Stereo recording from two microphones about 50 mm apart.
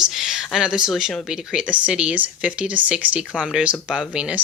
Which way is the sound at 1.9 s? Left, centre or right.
Right.